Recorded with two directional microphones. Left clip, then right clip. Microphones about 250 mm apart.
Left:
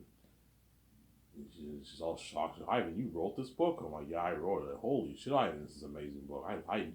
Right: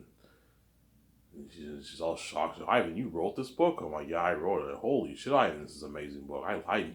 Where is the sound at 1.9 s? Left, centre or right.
Centre.